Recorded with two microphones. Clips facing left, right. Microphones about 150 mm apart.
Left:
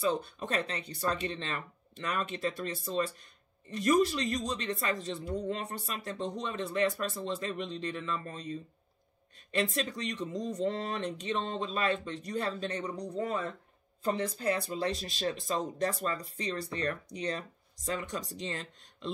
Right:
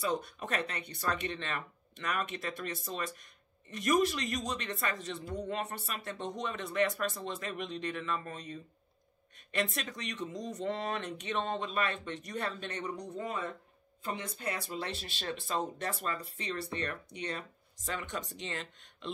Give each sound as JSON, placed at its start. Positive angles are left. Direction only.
{"t": 0.0, "sound": "speech", "side_deg": 30}